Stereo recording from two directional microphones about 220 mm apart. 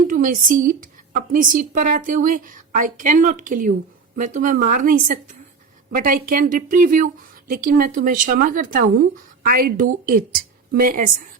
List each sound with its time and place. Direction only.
0.1 s a woman's voice: 35° right (ahead or behind)